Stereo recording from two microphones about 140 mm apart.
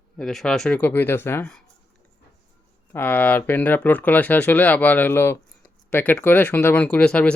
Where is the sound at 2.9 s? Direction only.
15° left (ahead or behind).